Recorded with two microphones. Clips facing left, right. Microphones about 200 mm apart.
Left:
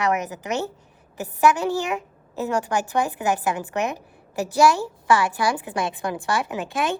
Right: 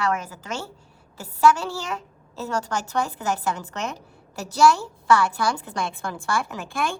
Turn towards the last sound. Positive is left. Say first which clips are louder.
# left 3 dB
turn(degrees=20)  # may be behind; listen again after turning